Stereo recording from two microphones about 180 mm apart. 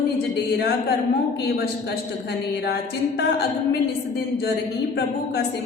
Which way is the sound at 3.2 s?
70° left (ahead or behind).